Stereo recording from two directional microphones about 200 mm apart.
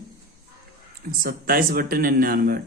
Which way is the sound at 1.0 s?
45° right (ahead or behind).